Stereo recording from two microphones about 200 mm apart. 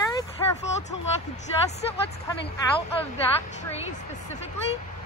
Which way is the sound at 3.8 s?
35° left (ahead or behind).